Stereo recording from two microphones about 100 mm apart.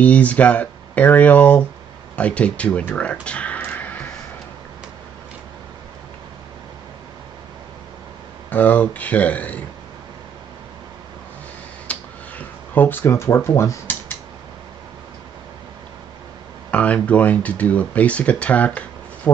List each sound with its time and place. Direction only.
0.0 s speech: 15° left (ahead or behind)
8.5 s speech: 15° left (ahead or behind)
11.9 s a sound: 15° left (ahead or behind)
16.7 s speech: 15° left (ahead or behind)